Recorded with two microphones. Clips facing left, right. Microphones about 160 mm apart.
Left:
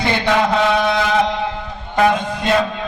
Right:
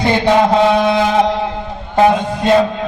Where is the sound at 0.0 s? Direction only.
30° right (ahead or behind).